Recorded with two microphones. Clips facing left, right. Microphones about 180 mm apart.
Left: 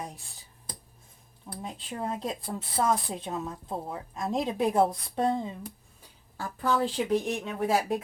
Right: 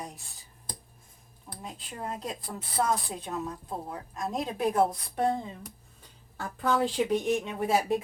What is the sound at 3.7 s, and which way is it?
Speech, centre (ahead or behind).